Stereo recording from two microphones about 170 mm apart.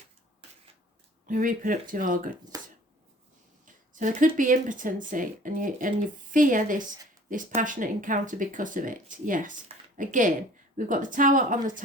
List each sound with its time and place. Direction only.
1.3 s speech: 50° right (ahead or behind)
2.5 s a sound: 20° right (ahead or behind)
3.9 s speech: 50° right (ahead or behind)